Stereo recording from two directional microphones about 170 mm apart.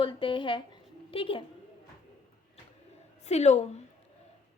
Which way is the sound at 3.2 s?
40° left (ahead or behind).